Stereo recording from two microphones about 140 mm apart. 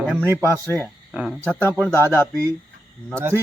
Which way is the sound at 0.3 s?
15° right (ahead or behind).